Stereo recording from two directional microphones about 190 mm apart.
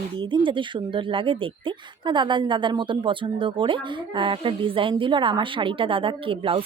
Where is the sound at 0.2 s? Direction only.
25° right (ahead or behind).